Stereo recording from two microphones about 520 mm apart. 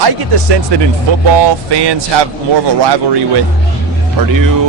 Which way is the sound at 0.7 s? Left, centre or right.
Right.